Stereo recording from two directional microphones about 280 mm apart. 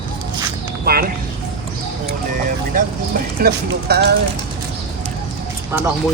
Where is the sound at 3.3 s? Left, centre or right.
Right.